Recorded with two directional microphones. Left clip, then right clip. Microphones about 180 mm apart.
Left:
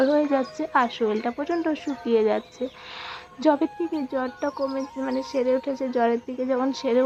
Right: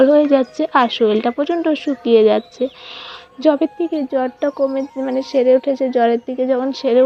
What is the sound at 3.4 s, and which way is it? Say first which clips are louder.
Speech: right 7 dB; 15° right (ahead or behind).